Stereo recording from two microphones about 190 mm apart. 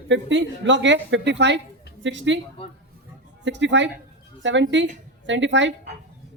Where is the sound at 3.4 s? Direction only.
70° right (ahead or behind).